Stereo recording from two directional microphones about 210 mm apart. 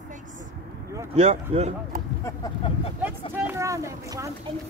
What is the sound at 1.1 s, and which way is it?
Speech, 30° right (ahead or behind).